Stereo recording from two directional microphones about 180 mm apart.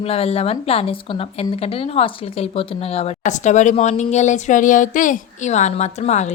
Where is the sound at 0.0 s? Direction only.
35° left (ahead or behind).